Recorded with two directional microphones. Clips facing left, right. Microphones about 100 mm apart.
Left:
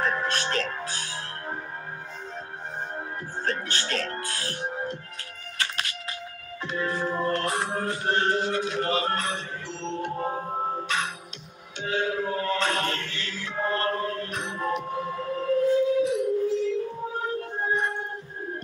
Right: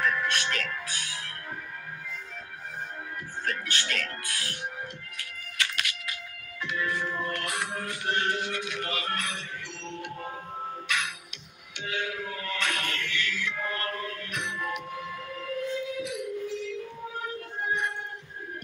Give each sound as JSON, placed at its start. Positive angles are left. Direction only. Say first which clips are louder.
{"t": 0.0, "sound": "music", "louder": "left 1 dB", "side_deg": 35}
{"t": 3.4, "sound": "music", "louder": "left 2 dB", "side_deg": 35}
{"t": 5.6, "sound": "a sound", "louder": "left 1 dB", "side_deg": 35}
{"t": 6.6, "sound": "music", "louder": "left 3 dB", "side_deg": 35}